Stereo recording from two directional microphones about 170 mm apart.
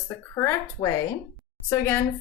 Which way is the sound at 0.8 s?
30° left (ahead or behind).